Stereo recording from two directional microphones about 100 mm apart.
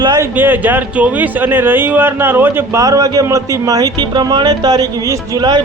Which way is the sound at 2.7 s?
35° right (ahead or behind).